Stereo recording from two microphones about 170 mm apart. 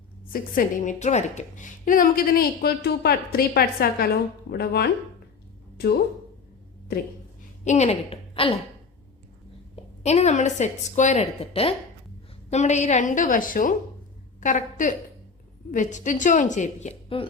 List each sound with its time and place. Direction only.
0.3 s a woman's voice: 55° left (ahead or behind)
5.7 s a sound: 70° left (ahead or behind)
7.6 s a woman's voice: 45° left (ahead or behind)
10.0 s a woman's voice: 40° left (ahead or behind)